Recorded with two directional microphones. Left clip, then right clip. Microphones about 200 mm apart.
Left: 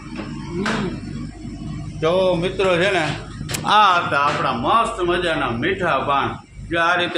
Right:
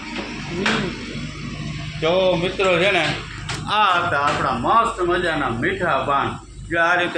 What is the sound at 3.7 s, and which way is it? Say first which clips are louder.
Speech: left 4 dB; 30° left (ahead or behind).